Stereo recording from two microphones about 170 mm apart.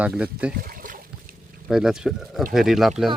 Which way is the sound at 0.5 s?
60° right (ahead or behind).